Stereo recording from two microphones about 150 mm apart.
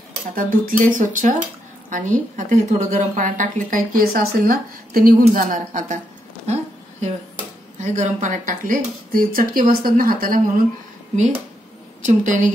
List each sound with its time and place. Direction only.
0.3 s a woman's voice: 70° right (ahead or behind)
6.4 s a sound: 45° right (ahead or behind)
7.8 s speech: 55° right (ahead or behind); by 10.6 s 70° right (ahead or behind)
12.1 s a woman's voice: 55° right (ahead or behind)